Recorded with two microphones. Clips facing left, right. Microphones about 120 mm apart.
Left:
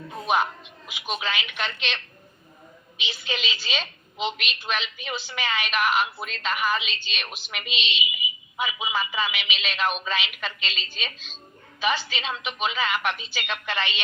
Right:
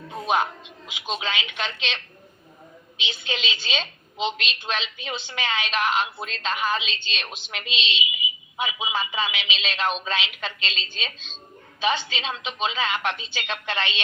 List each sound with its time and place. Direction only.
0.1 s a woman's voice: 20° right (ahead or behind)
3.0 s a woman's voice: 25° right (ahead or behind)